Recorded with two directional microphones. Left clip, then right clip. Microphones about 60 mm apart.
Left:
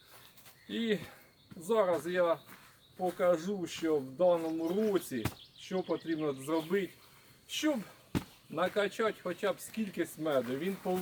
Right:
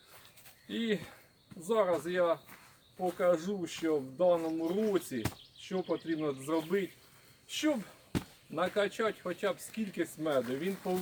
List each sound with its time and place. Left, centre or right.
0.7 s speech: centre
8.1 s basketball bounce: right
8.5 s speech: centre